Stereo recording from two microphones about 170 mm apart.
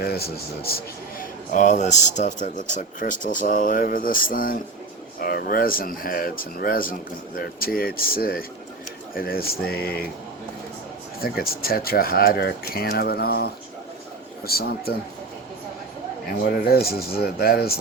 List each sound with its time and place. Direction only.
0.0 s speech: 65° left (ahead or behind)
1.5 s speech: 45° left (ahead or behind); by 10.1 s 65° left (ahead or behind)
11.6 s speech: 60° left (ahead or behind)
16.5 s speech: 65° left (ahead or behind)